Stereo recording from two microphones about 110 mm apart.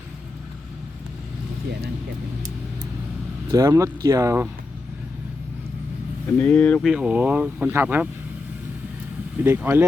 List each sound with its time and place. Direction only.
3.5 s speech: 30° right (ahead or behind)
6.4 s speech: 15° left (ahead or behind)
6.8 s speech: 10° right (ahead or behind)
9.4 s speech: 20° right (ahead or behind)